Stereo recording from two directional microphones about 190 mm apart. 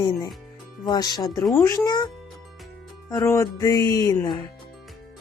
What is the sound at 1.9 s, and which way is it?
Music, 20° left (ahead or behind).